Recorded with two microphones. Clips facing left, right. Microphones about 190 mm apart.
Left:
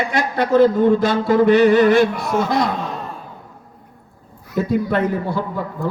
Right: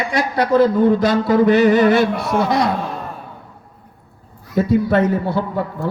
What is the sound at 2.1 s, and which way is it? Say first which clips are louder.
Speech: right 1 dB; 65° right (ahead or behind).